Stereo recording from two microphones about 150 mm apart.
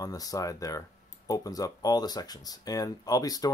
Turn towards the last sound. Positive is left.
turn(degrees=25)  # may be behind; listen again after turning